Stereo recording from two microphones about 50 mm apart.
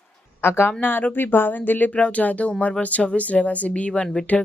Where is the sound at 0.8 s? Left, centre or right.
Left.